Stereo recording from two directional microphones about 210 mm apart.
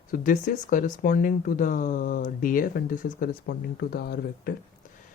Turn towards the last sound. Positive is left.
turn(degrees=45)  # may be behind; listen again after turning